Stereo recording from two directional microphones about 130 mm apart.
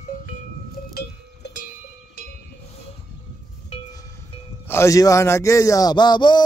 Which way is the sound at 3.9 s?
25° left (ahead or behind).